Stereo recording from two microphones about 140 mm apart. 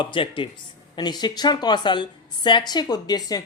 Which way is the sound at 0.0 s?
35° left (ahead or behind).